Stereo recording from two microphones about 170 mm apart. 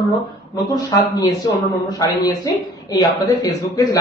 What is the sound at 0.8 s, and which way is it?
Speech, 25° left (ahead or behind).